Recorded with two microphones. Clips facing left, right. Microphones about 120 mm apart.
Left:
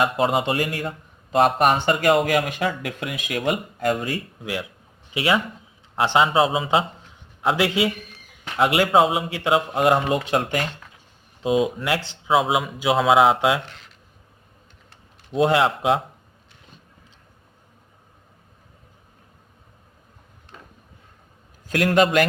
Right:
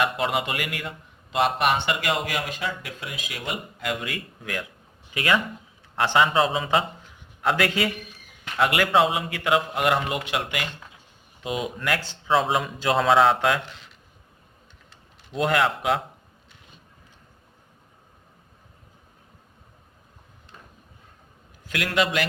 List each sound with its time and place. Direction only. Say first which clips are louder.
0.0 s a man's voice: left 4 dB; 30° left (ahead or behind)
5.1 s a man's voice: left 2 dB; 20° left (ahead or behind); by 10.7 s 40° left (ahead or behind)
11.4 s speech: left 7 dB; 25° left (ahead or behind)
12.3 s a man's voice: left 2 dB; 10° left (ahead or behind)
15.4 s speech: left 4 dB; 25° left (ahead or behind)
21.7 s a man's voice: left 6 dB; 40° left (ahead or behind)